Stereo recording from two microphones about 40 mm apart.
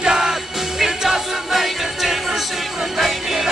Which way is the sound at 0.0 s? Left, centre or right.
Centre.